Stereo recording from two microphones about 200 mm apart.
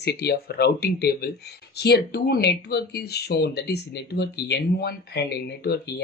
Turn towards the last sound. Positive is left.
turn(degrees=55)  # may be behind; listen again after turning